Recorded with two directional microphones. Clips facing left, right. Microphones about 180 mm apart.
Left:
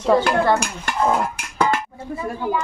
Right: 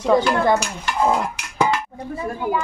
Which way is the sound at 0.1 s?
15° right (ahead or behind).